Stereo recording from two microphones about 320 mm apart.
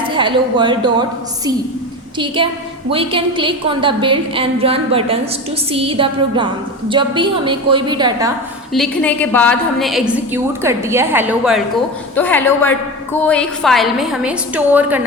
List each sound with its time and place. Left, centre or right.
0.1 s a woman's voice: centre
2.1 s a woman's voice: centre
8.7 s a woman's voice: centre